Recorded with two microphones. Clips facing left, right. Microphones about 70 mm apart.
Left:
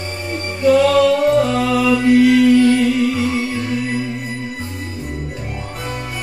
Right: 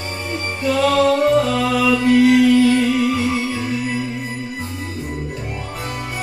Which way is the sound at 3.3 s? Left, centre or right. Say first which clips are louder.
Left 1 dB; left.